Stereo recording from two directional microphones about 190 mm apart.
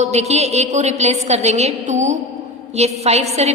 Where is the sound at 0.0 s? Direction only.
35° right (ahead or behind).